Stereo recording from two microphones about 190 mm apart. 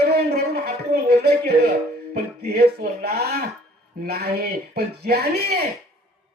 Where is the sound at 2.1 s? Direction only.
55° right (ahead or behind).